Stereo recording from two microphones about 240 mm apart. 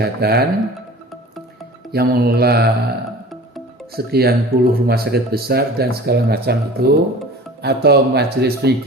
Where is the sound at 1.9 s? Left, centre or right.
Right.